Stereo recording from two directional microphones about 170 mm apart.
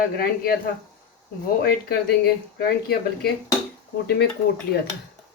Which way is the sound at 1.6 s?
65° left (ahead or behind).